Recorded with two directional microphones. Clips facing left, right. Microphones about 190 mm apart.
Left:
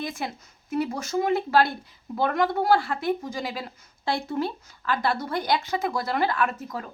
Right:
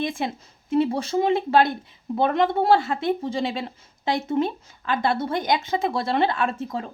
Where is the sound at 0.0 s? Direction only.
25° right (ahead or behind).